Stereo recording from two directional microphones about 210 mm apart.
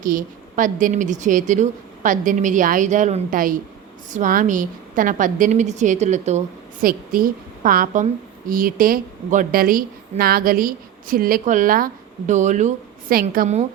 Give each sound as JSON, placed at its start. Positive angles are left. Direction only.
{"t": 0.0, "sound": "a woman's voice", "side_deg": -40}
{"t": 6.8, "sound": "a woman's voice", "side_deg": -45}